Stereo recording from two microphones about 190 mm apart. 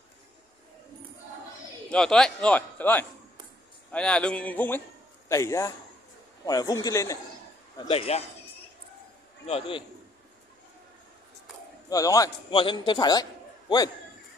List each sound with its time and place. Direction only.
1.9 s a man's voice: 5° left (ahead or behind); by 8.2 s 30° left (ahead or behind)
9.5 s a man's voice: 30° left (ahead or behind)
11.9 s a man's voice: 20° left (ahead or behind)